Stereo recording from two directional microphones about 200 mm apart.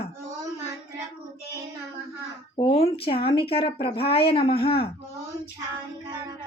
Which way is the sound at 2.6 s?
30° left (ahead or behind).